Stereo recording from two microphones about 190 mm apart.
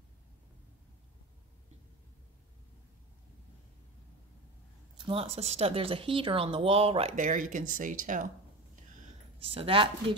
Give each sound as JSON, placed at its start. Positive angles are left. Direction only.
{"t": 4.9, "sound": "speech", "side_deg": -25}
{"t": 9.4, "sound": "speech", "side_deg": -30}